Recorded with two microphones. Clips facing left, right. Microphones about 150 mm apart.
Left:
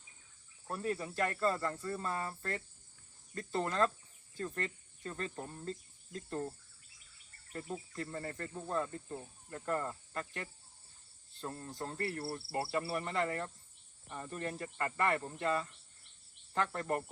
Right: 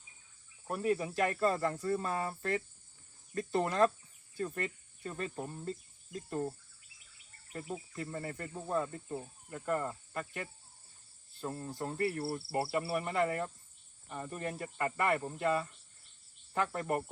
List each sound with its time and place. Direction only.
0.7 s speech: 15° right (ahead or behind)
3.3 s cricket: 15° right (ahead or behind)
4.4 s speech: 10° right (ahead or behind)
7.5 s cricket: 10° right (ahead or behind)
11.7 s cricket: 10° right (ahead or behind)